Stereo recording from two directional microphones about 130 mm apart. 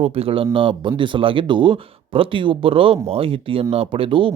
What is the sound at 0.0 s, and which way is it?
Speech, 50° right (ahead or behind).